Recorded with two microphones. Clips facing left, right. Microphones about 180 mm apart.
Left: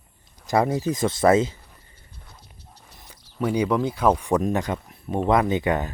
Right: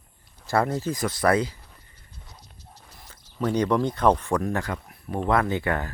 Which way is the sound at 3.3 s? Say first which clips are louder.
Left 1 dB; 10° left (ahead or behind).